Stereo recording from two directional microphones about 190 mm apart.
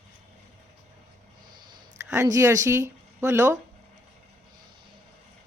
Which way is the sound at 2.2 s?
15° right (ahead or behind).